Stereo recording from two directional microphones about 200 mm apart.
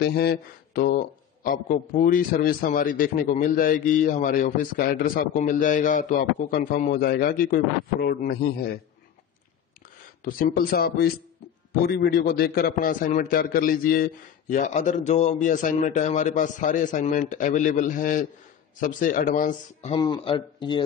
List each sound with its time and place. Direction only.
0.0 s a man's voice: 50° left (ahead or behind)
10.2 s a man's voice: 45° left (ahead or behind)
19.9 s speech: 25° left (ahead or behind)